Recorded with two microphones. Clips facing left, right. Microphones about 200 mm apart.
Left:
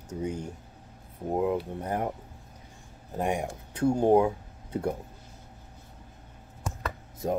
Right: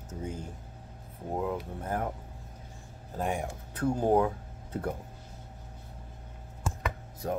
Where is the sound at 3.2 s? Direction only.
15° left (ahead or behind).